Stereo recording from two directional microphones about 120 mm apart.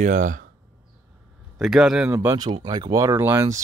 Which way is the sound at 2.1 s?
20° right (ahead or behind).